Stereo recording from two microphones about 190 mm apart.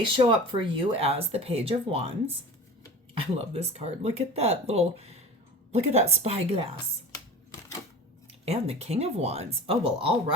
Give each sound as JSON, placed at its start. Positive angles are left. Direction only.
{"t": 0.0, "sound": "speech", "side_deg": -25}
{"t": 8.4, "sound": "speech", "side_deg": -35}